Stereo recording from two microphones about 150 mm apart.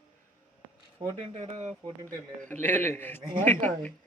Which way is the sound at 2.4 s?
10° left (ahead or behind).